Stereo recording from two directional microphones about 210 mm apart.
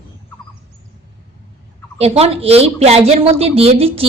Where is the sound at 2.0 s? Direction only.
30° right (ahead or behind).